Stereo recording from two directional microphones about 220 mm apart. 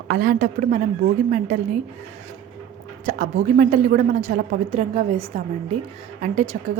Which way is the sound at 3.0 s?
35° right (ahead or behind).